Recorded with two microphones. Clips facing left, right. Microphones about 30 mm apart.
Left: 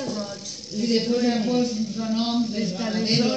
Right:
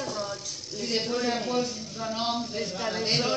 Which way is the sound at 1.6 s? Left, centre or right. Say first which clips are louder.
Left 8 dB; left.